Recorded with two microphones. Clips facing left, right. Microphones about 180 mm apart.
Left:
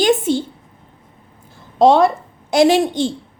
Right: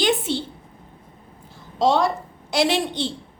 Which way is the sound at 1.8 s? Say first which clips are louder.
Left 7 dB; 55° left (ahead or behind).